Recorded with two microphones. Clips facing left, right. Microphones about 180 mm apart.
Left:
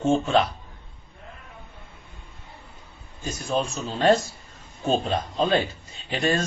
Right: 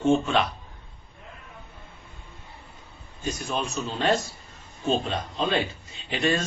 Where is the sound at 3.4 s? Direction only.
35° left (ahead or behind).